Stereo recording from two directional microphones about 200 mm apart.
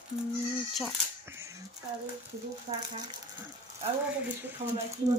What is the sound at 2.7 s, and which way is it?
Speech, 40° right (ahead or behind).